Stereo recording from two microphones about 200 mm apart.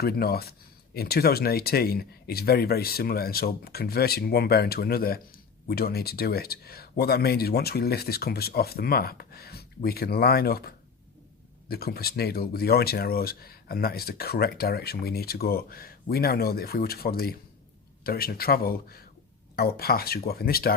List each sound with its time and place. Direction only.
0.0 s speech: 50° left (ahead or behind)